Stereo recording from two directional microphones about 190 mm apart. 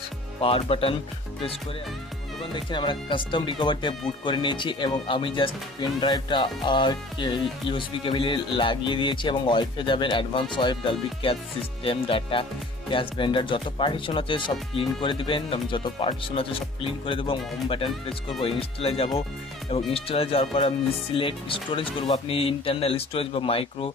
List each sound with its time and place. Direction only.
0.4 s speech: 30° left (ahead or behind)
2.5 s speech: 25° left (ahead or behind)